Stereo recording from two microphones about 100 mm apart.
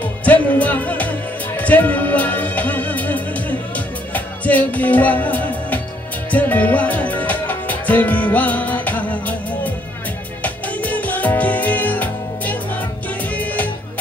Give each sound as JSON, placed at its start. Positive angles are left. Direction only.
{"t": 0.0, "sound": "music", "side_deg": 15}
{"t": 10.4, "sound": "music", "side_deg": 15}